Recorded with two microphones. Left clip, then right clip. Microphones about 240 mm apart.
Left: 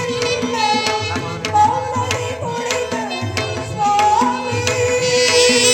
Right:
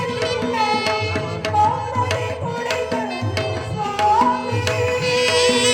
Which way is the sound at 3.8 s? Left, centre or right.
Right.